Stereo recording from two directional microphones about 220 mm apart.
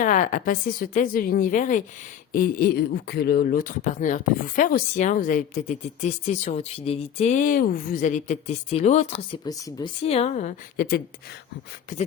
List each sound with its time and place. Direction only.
0.0 s speech: 35° left (ahead or behind)